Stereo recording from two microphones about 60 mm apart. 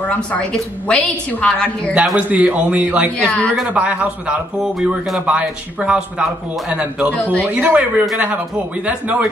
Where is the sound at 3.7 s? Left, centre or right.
Right.